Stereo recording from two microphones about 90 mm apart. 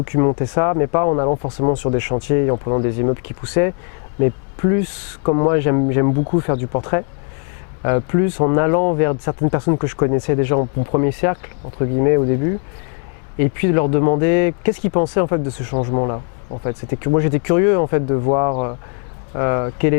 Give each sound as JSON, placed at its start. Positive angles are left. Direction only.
{"t": 0.0, "sound": "speech", "side_deg": 15}